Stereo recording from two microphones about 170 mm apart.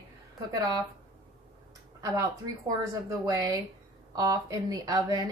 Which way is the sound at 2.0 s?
20° right (ahead or behind).